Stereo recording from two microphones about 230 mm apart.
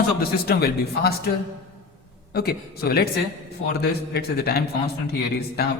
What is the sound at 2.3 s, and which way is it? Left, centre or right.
A man's voice, left.